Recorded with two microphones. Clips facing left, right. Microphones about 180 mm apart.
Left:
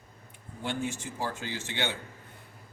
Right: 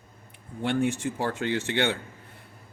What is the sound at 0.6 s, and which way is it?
Speech, 65° right (ahead or behind).